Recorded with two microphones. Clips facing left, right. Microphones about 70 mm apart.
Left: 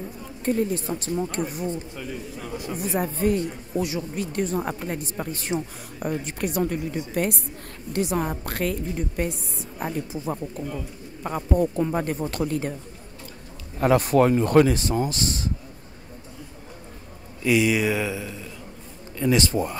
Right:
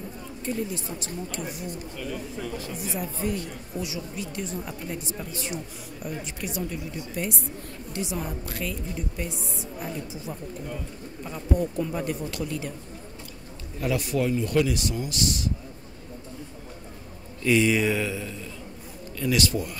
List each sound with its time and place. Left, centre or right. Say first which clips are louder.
0.5 s a woman's voice: left 7 dB; left
2.0 s a man's voice: right 1 dB; centre
2.7 s a woman's voice: left 6 dB; left
13.7 s speech: left 8 dB; left
17.4 s a man's voice: left 1 dB; centre
19.1 s a man's voice: left 4 dB; left